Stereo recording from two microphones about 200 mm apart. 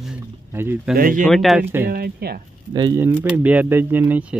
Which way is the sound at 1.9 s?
50° right (ahead or behind).